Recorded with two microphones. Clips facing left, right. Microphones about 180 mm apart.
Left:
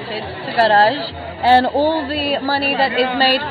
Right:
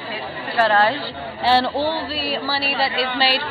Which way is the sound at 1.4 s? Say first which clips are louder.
Left 5 dB; 50° left (ahead or behind).